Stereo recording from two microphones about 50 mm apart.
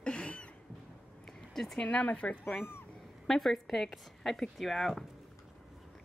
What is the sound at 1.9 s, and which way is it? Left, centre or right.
Speech, left.